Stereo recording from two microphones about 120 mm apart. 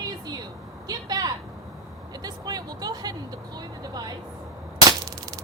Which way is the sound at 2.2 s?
35° right (ahead or behind).